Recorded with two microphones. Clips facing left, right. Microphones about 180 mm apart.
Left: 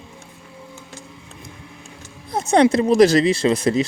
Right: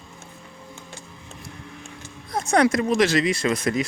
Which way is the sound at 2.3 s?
25° left (ahead or behind).